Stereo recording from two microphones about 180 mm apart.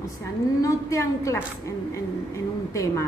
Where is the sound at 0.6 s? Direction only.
15° left (ahead or behind).